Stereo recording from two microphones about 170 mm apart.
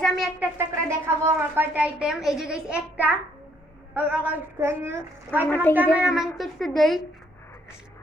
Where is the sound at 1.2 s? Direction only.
10° right (ahead or behind).